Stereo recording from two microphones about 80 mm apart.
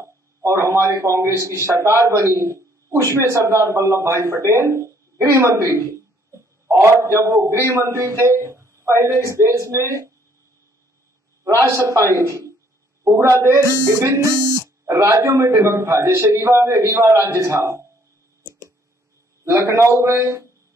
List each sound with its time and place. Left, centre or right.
0.0 s a man's voice: right
11.4 s speech: right
19.5 s speech: right